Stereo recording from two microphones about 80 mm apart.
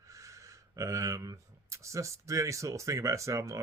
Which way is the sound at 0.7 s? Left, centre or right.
Right.